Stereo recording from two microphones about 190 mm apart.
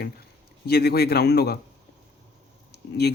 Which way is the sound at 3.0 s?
55° left (ahead or behind).